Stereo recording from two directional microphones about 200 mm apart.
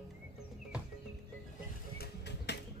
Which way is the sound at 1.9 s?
60° left (ahead or behind).